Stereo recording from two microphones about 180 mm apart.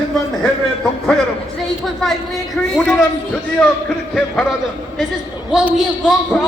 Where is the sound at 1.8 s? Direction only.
Centre (ahead or behind).